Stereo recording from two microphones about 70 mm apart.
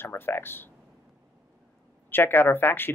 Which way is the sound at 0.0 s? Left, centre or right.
Left.